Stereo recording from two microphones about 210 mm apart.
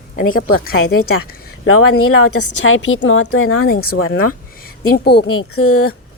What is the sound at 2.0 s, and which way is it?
A woman's voice, 75° left (ahead or behind).